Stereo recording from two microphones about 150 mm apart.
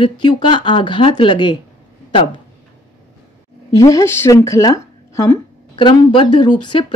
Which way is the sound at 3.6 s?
20° left (ahead or behind).